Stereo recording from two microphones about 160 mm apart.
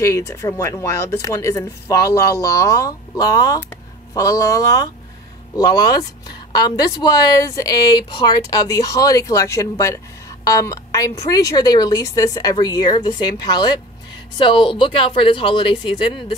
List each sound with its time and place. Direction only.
0.0 s a woman's voice: 15° left (ahead or behind)